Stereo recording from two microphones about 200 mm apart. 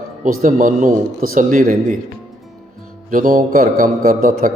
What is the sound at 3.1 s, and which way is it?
A man's voice, 40° right (ahead or behind).